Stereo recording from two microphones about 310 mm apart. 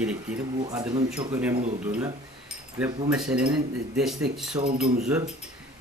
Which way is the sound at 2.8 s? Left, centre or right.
Centre.